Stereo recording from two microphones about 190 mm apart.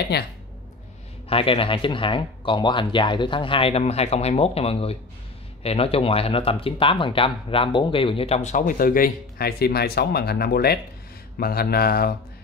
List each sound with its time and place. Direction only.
0.1 s speech: 60° left (ahead or behind)
1.3 s speech: 30° left (ahead or behind); by 12.1 s 55° left (ahead or behind)